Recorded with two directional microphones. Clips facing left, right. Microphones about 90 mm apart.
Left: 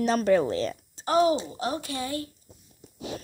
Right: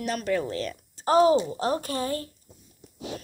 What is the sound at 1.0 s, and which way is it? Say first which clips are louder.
A woman's voice: right 3 dB; 35° right (ahead or behind).